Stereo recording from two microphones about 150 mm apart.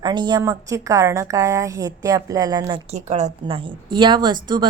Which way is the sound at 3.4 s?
35° right (ahead or behind).